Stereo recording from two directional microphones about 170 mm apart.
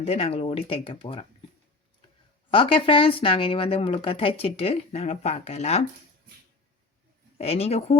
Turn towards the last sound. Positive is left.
turn(degrees=35)  # may be behind; listen again after turning